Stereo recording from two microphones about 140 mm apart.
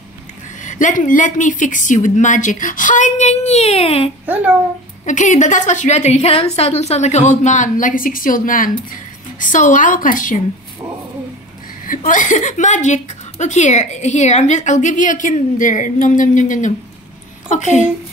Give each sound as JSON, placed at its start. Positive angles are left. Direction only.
{"t": 0.6, "sound": "speech", "side_deg": 65}
{"t": 5.0, "sound": "a woman's voice", "side_deg": 60}
{"t": 11.8, "sound": "a woman's voice", "side_deg": 75}